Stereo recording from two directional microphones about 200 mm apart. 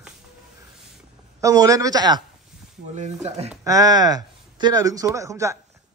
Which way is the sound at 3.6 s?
15° right (ahead or behind).